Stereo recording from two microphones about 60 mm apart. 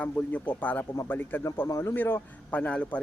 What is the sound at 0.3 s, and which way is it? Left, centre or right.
A man's voice, left.